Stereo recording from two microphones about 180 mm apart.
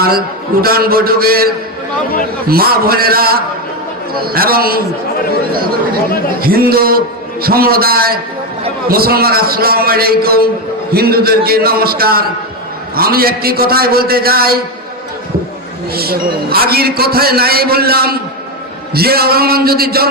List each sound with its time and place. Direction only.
0.6 s a man's voice: 55° right (ahead or behind)
2.5 s a man's voice: 55° right (ahead or behind)
15.9 s a man's voice: 60° right (ahead or behind)